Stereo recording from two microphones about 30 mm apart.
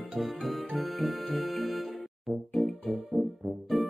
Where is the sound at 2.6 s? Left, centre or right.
Right.